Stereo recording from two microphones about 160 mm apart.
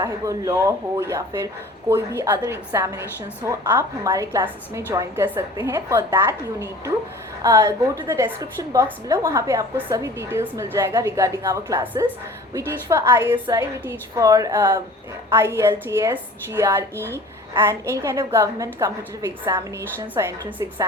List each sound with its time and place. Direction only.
0.0 s a woman's voice: 20° right (ahead or behind)